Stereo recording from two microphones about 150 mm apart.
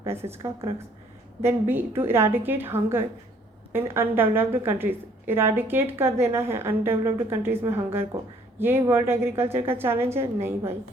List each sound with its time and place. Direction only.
0.0 s a woman's voice: 15° right (ahead or behind)